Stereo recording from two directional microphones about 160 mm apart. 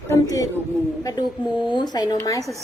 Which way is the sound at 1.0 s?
20° left (ahead or behind).